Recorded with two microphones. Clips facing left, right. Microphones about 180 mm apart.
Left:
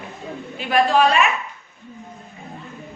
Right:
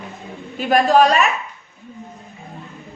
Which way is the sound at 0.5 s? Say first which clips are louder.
Right 3 dB; 40° right (ahead or behind).